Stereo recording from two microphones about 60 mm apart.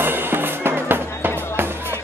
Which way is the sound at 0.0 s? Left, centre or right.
Right.